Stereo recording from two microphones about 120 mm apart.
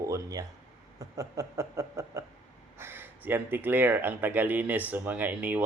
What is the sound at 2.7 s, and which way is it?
Speech, 20° right (ahead or behind).